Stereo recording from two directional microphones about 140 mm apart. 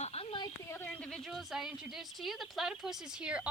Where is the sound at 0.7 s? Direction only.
15° left (ahead or behind).